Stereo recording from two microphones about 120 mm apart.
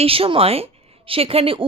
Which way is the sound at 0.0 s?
50° right (ahead or behind).